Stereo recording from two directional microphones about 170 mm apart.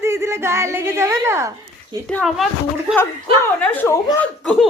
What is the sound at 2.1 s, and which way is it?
Speech, 5° left (ahead or behind).